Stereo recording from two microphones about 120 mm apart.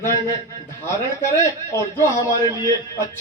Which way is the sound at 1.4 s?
25° left (ahead or behind).